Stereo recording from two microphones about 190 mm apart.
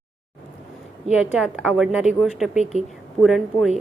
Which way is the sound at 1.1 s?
5° right (ahead or behind).